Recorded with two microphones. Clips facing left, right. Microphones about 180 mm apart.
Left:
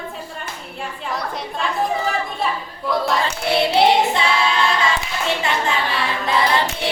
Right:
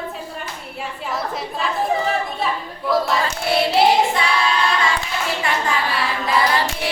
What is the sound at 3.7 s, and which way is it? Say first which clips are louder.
Child singing: left 1 dB; centre (ahead or behind).